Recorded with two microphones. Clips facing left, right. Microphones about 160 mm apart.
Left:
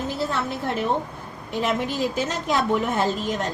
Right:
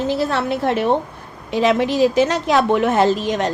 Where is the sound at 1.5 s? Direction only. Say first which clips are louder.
Right 8 dB; 90° right.